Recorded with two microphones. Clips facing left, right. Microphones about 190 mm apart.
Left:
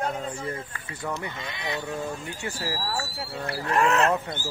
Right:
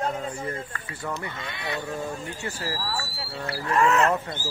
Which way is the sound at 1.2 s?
20° left (ahead or behind).